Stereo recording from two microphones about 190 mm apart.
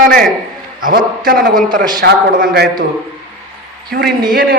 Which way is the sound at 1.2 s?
50° right (ahead or behind).